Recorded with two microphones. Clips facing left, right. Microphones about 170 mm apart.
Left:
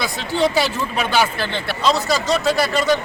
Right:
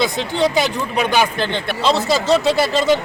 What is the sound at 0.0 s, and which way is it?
Speech, 20° right (ahead or behind).